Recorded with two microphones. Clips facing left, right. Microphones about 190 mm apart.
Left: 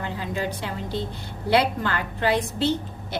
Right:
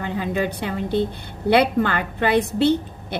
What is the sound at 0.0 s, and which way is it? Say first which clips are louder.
A woman's voice: right 5 dB; 60° right (ahead or behind).